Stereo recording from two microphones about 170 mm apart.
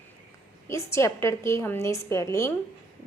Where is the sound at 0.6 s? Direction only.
15° left (ahead or behind).